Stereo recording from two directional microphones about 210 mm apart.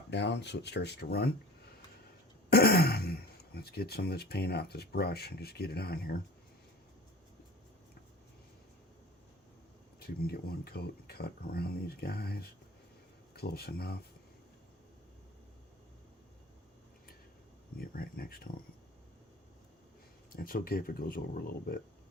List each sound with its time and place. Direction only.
0.1 s speech: 55° left (ahead or behind)
2.5 s speech: 50° left (ahead or behind)
10.0 s speech: 45° left (ahead or behind)
17.7 s speech: 45° left (ahead or behind)
20.3 s speech: 45° left (ahead or behind)